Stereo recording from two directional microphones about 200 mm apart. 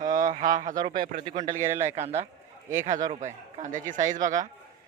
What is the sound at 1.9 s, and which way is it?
Speech, 35° right (ahead or behind).